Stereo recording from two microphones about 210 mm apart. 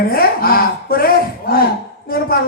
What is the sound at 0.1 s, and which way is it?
Speech, 45° left (ahead or behind).